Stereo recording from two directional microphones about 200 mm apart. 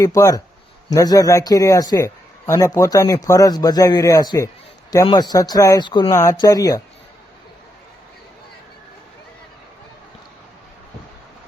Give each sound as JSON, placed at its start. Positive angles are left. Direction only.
{"t": 0.0, "sound": "a man's voice", "side_deg": 15}